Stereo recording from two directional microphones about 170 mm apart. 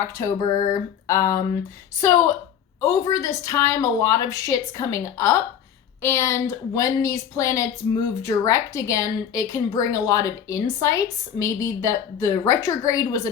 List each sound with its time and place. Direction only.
0.0 s a woman's voice: 20° left (ahead or behind)